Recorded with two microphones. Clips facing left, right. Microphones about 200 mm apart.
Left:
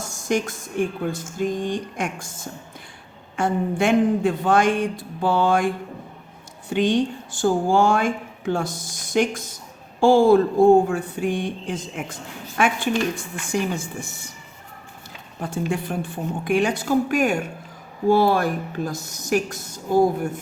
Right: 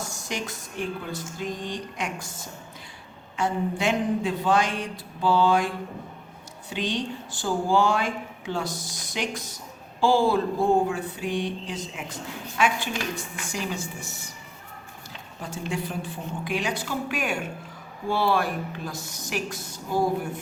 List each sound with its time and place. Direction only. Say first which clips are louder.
0.0 s speech: left 9 dB; 50° left (ahead or behind)
15.7 s speech: left 5 dB; 55° left (ahead or behind)